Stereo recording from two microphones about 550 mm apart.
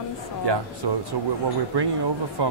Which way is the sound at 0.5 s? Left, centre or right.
Right.